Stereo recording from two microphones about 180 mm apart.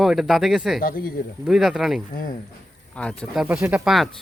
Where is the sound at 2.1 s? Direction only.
50° left (ahead or behind).